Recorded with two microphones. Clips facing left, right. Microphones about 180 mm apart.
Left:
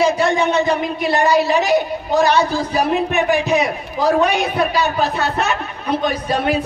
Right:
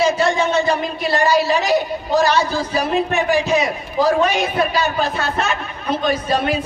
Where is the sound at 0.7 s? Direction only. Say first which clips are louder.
Left 1 dB; 20° left (ahead or behind).